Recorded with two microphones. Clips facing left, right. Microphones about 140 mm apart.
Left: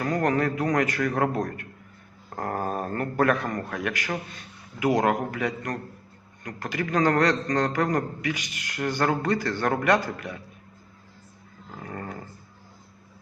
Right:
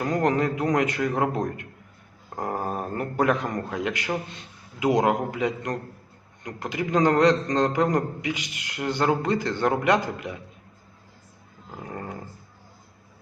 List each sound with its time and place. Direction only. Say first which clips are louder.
0.0 s a man's voice: right 1 dB; 20° right (ahead or behind)
11.8 s dog: right 1 dB; 20° right (ahead or behind)